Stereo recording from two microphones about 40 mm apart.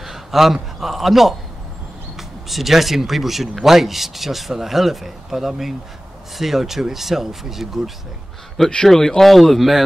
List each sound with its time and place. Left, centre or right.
0.0 s a man's voice: centre
8.8 s speech: centre
9.3 s speech: centre